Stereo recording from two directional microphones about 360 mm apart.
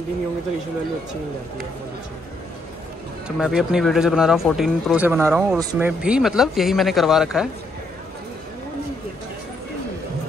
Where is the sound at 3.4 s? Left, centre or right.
Centre.